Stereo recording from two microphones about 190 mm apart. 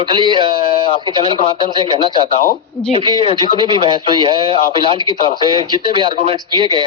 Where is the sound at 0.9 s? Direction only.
25° left (ahead or behind).